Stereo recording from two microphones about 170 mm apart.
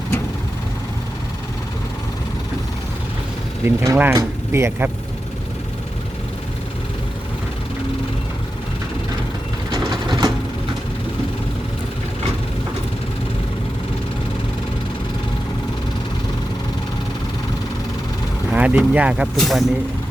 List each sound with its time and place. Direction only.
3.6 s speech: 15° right (ahead or behind)
9.7 s vehicle: 25° right (ahead or behind)
18.5 s speech: 10° right (ahead or behind)